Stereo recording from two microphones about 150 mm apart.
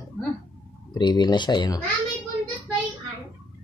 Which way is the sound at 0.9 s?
30° left (ahead or behind).